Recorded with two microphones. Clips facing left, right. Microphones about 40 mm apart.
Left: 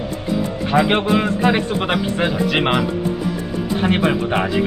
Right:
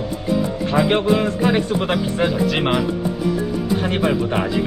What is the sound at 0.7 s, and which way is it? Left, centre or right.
A man's voice, left.